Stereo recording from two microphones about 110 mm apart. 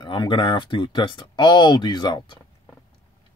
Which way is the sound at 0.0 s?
45° left (ahead or behind).